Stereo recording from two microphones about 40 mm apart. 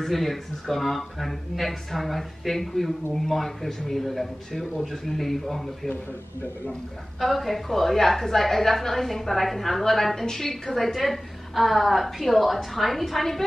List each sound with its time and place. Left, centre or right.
0.0 s a woman's voice: centre
7.2 s a woman's voice: centre